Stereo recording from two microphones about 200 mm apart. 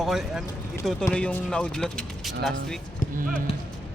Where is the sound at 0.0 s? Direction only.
Centre (ahead or behind).